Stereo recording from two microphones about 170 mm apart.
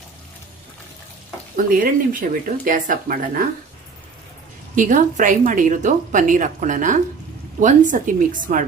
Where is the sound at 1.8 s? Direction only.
55° right (ahead or behind).